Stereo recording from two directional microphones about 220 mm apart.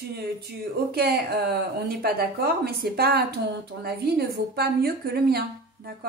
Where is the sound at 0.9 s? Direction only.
45° right (ahead or behind).